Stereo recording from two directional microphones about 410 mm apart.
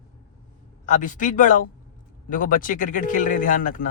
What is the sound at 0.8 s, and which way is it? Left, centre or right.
A man's voice, centre.